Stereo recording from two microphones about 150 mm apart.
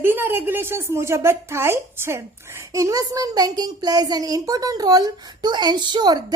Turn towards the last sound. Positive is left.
turn(degrees=-30)  # may be behind; listen again after turning